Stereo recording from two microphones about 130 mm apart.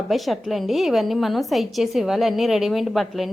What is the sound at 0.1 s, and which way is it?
A woman's voice, centre (ahead or behind).